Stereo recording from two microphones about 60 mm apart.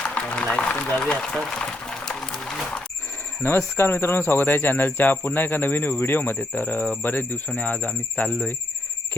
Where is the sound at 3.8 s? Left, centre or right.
Left.